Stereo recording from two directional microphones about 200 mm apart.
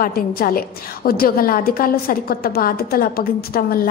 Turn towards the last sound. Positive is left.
turn(degrees=50)  # may be behind; listen again after turning